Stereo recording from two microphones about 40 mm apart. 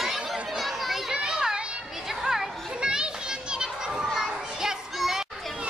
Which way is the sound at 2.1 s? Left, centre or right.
Centre.